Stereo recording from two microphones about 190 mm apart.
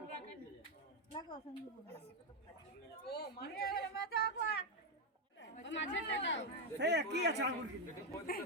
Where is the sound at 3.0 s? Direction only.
60° left (ahead or behind).